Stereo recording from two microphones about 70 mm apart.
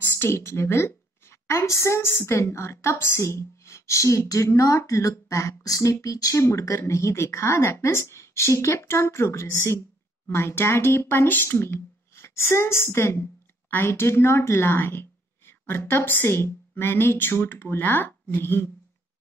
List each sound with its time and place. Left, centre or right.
0.1 s a woman's voice: left